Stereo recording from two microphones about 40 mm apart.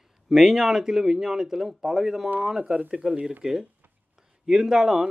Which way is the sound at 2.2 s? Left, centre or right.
Right.